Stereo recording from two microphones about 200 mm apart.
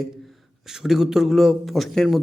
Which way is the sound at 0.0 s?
Centre (ahead or behind).